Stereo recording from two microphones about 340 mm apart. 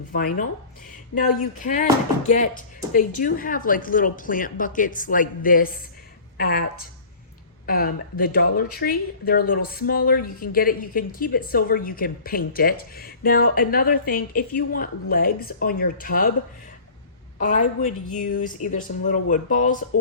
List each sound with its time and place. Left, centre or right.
0.1 s a woman's voice: left
1.5 s a woman's voice: left
7.7 s a woman's voice: left
17.3 s a woman's voice: left